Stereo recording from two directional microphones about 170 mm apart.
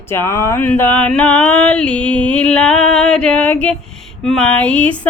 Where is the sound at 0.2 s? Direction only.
15° left (ahead or behind).